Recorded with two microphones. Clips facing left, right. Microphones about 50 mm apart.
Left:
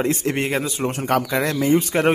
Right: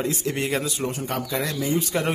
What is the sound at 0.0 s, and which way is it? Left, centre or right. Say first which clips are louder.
Speech: left 4 dB; left.